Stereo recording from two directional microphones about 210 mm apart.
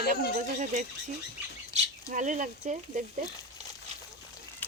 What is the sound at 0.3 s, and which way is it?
Speech, 35° right (ahead or behind).